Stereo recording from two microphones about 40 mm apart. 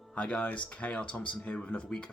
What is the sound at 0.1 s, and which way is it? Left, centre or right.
Speech, left.